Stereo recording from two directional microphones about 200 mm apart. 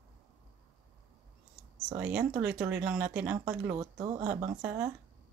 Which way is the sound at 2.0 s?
5° right (ahead or behind).